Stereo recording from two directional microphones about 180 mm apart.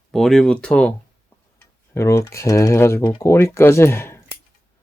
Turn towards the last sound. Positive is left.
turn(degrees=15)  # may be behind; listen again after turning